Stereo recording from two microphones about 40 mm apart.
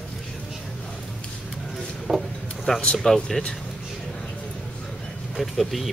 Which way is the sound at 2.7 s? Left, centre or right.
Centre.